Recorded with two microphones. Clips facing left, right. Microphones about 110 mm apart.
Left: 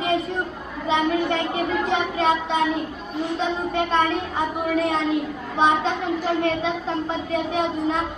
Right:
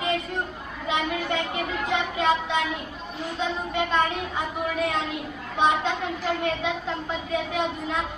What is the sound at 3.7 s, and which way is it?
Speech, 35° left (ahead or behind).